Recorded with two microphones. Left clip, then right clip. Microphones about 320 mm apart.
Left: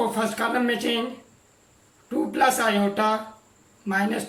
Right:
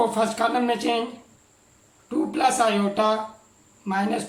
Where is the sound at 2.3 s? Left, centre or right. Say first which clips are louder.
Even; centre.